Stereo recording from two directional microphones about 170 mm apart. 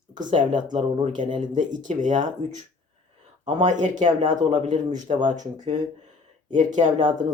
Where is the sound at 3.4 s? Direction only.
45° right (ahead or behind).